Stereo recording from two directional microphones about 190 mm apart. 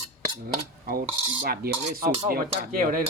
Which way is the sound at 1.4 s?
50° right (ahead or behind).